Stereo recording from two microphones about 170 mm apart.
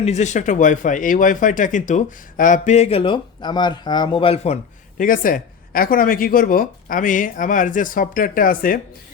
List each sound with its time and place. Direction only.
0.0 s speech: 40° left (ahead or behind)
4.9 s speech: 55° left (ahead or behind)